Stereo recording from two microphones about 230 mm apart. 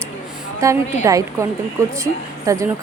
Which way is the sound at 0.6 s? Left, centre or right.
Centre.